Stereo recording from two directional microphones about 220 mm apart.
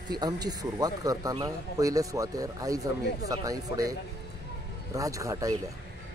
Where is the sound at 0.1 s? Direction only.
20° right (ahead or behind).